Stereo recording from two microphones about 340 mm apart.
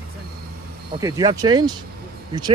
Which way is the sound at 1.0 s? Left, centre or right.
Centre.